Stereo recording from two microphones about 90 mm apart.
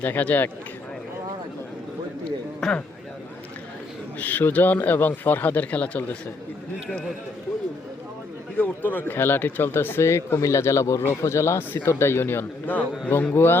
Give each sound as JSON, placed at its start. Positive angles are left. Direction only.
{"t": 0.0, "sound": "speech", "side_deg": 20}
{"t": 2.6, "sound": "speech", "side_deg": 5}
{"t": 4.2, "sound": "speech", "side_deg": 20}
{"t": 8.5, "sound": "speech", "side_deg": 20}